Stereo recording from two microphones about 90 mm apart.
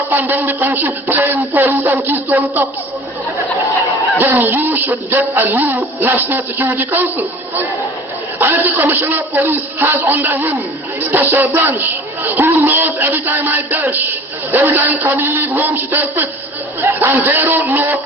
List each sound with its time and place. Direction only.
0.1 s speech: 20° right (ahead or behind)
4.2 s speech: 20° right (ahead or behind)
8.4 s speech: 25° right (ahead or behind)